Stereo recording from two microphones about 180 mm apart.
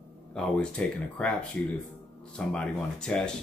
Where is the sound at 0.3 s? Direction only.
5° left (ahead or behind).